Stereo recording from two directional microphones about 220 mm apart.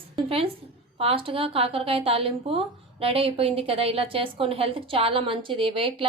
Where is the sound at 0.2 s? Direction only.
25° right (ahead or behind).